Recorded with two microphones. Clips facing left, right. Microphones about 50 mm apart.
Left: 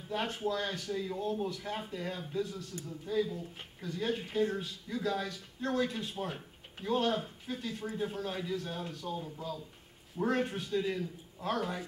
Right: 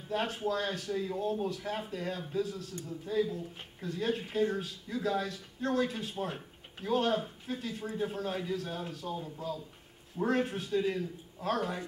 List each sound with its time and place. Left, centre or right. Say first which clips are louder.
0.1 s speech: right 2 dB; centre
10.1 s speech: right 1 dB; centre